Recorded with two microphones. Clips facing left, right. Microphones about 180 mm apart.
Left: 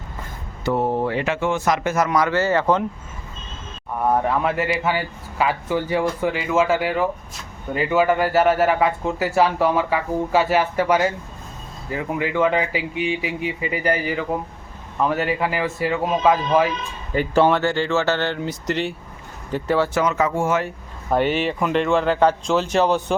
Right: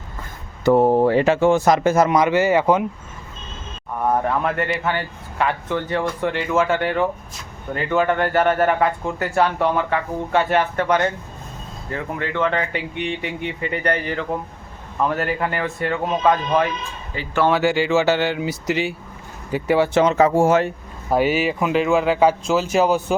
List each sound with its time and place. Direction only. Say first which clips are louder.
0.6 s speech: right 6 dB; 45° right (ahead or behind); by 2.8 s 15° right (ahead or behind)
4.0 s speech: even; centre (ahead or behind)
17.1 s speech: left 9 dB; 50° left (ahead or behind)
17.5 s speech: right 2 dB; 10° right (ahead or behind)
20.0 s speech: right 5 dB; 30° right (ahead or behind)
21.1 s speech: right 1 dB; 5° right (ahead or behind)